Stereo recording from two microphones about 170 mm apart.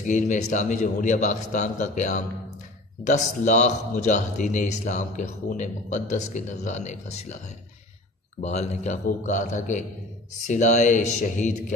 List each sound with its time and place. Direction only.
0.0 s a man's voice: 45° left (ahead or behind)